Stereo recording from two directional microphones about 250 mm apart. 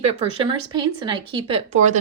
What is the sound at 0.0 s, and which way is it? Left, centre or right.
Speech, right.